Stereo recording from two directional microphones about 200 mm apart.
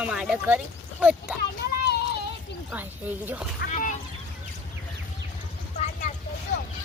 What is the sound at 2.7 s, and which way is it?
Speech, 10° right (ahead or behind).